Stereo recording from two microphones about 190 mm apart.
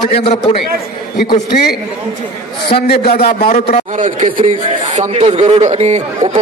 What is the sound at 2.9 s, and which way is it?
Speech, 55° left (ahead or behind).